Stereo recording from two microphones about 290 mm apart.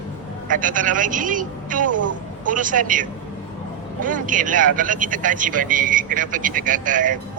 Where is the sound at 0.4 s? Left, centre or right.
Right.